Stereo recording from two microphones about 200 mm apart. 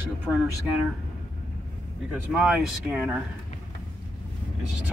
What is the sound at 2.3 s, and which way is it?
Speech, 5° right (ahead or behind).